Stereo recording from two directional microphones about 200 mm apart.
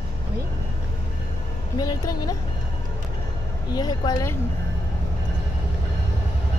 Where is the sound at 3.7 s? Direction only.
20° left (ahead or behind).